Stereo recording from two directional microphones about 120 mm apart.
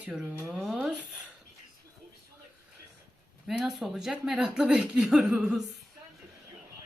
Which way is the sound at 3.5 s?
Centre (ahead or behind).